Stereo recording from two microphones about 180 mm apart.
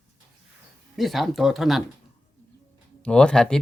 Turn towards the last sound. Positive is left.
turn(degrees=5)  # may be behind; listen again after turning